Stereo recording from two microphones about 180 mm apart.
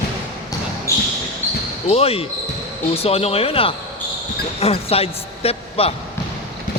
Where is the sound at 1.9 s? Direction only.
35° left (ahead or behind).